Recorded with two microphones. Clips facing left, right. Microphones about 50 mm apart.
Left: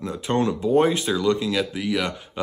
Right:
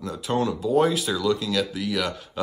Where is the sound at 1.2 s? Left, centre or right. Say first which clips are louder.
Left 1 dB; left.